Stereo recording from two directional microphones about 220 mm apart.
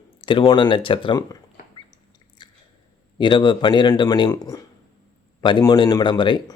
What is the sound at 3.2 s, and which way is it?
Speech, 20° left (ahead or behind).